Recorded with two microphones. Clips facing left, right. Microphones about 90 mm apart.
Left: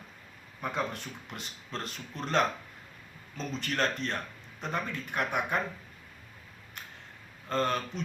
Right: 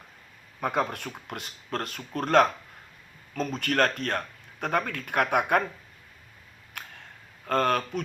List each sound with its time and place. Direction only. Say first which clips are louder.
0.6 s speech: right 6 dB; 50° right (ahead or behind)
6.8 s a sound: right 5 dB; 60° right (ahead or behind)
7.4 s speech: right 5 dB; 60° right (ahead or behind)